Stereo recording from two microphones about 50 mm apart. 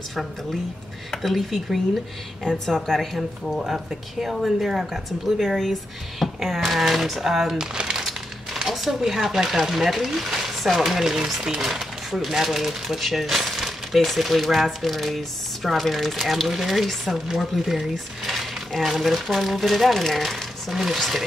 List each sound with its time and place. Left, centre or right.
1.1 s speech: centre
8.0 s speech: centre